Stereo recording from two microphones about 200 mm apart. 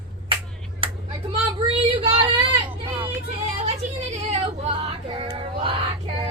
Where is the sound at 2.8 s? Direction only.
30° right (ahead or behind).